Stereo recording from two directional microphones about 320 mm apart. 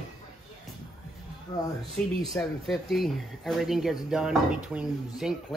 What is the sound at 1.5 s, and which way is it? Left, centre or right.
Speech, centre.